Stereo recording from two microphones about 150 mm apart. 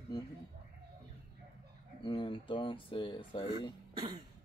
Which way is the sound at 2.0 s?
35° left (ahead or behind).